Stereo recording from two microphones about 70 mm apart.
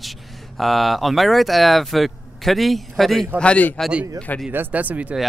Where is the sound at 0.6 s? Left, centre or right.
Centre.